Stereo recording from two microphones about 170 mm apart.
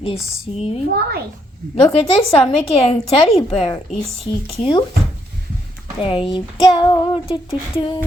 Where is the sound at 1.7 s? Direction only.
35° left (ahead or behind).